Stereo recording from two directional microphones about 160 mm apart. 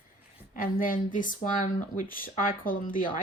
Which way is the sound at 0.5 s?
60° left (ahead or behind).